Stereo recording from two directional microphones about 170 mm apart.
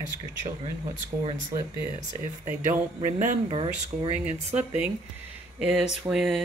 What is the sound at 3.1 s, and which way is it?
Speech, 45° right (ahead or behind).